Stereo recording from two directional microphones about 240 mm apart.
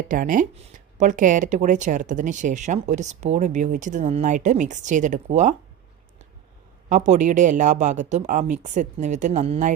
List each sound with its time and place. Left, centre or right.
0.1 s speech: right
6.8 s speech: right